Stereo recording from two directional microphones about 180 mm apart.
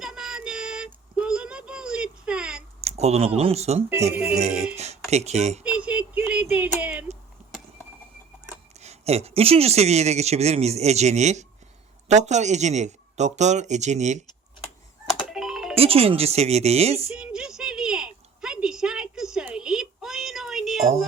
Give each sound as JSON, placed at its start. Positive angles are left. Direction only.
{"t": 0.0, "sound": "synthetic singing", "side_deg": 0}
{"t": 1.1, "sound": "a sound", "side_deg": -5}
{"t": 2.8, "sound": "speech", "side_deg": -35}
{"t": 4.1, "sound": "speech", "side_deg": -5}
{"t": 4.4, "sound": "speech", "side_deg": -40}
{"t": 5.6, "sound": "a sound", "side_deg": -5}
{"t": 8.8, "sound": "speech", "side_deg": -35}
{"t": 15.3, "sound": "music", "side_deg": 0}
{"t": 15.7, "sound": "speech", "side_deg": -35}
{"t": 17.2, "sound": "a sound", "side_deg": -5}